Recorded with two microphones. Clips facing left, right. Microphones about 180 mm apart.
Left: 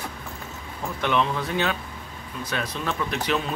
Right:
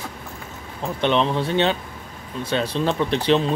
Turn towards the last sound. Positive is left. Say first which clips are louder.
# right 7 dB
turn(degrees=-30)  # may be behind; listen again after turning